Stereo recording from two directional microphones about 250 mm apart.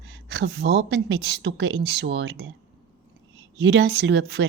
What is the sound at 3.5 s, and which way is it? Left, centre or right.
Speech, right.